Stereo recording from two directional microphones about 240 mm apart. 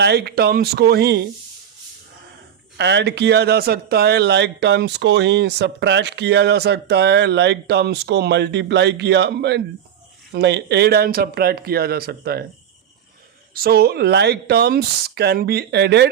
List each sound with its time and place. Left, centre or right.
0.0 s speech: right
2.7 s speech: right
13.5 s speech: right